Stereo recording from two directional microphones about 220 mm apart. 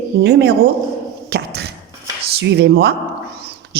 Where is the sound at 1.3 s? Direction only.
45° right (ahead or behind).